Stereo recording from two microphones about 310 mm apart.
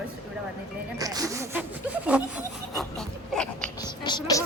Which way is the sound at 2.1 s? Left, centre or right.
Centre.